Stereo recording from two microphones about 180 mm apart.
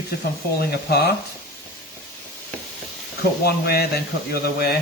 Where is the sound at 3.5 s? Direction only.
60° left (ahead or behind).